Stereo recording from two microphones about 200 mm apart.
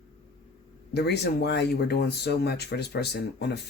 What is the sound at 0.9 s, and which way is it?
Speech, 55° left (ahead or behind).